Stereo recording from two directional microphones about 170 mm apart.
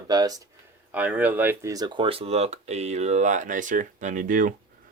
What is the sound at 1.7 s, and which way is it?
Speech, 25° right (ahead or behind).